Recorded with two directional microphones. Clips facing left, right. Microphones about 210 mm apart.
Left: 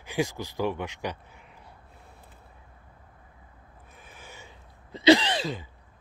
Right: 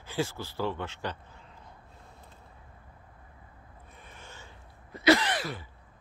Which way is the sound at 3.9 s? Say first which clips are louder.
Left 2 dB; 5° left (ahead or behind).